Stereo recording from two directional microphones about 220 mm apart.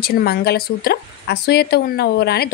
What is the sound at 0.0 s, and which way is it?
A woman's voice, 45° left (ahead or behind).